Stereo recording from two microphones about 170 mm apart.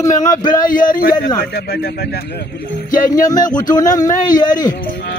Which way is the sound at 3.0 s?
20° left (ahead or behind).